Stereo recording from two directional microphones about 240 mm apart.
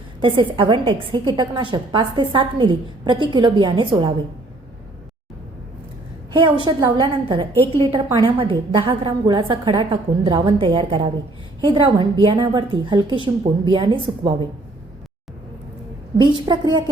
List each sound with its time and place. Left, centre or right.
0.2 s a woman's voice: right
6.7 s a woman's voice: centre
16.1 s a woman's voice: centre